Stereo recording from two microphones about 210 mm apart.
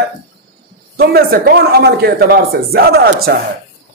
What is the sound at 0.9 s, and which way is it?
A man's voice, 50° right (ahead or behind).